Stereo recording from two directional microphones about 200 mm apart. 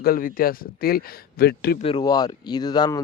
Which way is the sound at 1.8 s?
25° left (ahead or behind).